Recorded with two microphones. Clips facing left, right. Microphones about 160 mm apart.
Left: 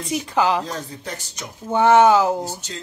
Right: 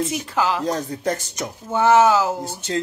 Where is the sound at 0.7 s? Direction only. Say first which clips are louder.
Right 8 dB; 45° right (ahead or behind).